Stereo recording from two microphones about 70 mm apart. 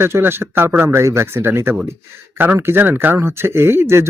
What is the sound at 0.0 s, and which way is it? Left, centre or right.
Speech, right.